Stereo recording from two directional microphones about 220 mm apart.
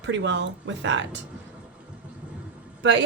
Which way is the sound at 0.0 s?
55° right (ahead or behind).